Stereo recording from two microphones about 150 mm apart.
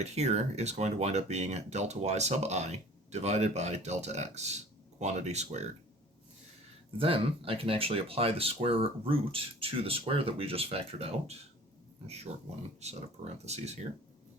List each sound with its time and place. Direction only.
0.0 s speech: 45° right (ahead or behind)
7.0 s speech: 40° right (ahead or behind)